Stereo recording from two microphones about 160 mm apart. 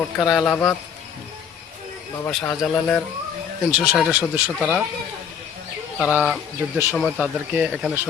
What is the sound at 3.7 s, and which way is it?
Speech, 5° right (ahead or behind).